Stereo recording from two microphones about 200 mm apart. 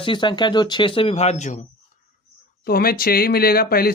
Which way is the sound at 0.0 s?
25° left (ahead or behind).